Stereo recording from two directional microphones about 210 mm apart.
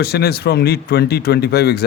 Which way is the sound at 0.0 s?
50° left (ahead or behind).